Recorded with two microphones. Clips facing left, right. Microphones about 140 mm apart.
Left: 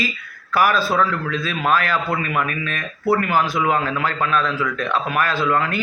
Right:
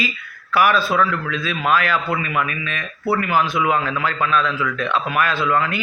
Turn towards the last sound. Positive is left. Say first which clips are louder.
# even
turn(degrees=45)  # may be behind; listen again after turning